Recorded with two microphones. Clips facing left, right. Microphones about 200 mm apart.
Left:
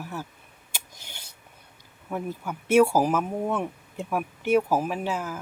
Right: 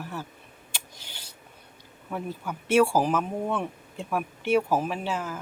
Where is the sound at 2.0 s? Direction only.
10° left (ahead or behind).